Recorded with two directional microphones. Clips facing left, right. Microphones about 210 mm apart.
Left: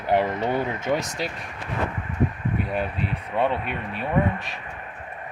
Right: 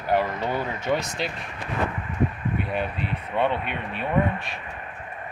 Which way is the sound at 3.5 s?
40° left (ahead or behind).